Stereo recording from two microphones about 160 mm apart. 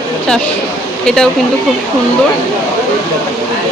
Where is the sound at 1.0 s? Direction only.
5° left (ahead or behind).